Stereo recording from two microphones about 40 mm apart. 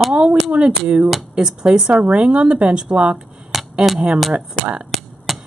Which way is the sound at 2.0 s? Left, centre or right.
Right.